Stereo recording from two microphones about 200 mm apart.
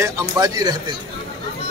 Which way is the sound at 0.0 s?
20° right (ahead or behind).